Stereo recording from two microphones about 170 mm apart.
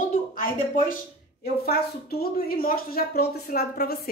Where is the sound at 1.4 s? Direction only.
65° left (ahead or behind).